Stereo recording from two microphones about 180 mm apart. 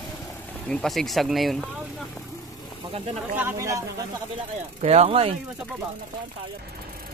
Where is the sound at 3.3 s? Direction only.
15° right (ahead or behind).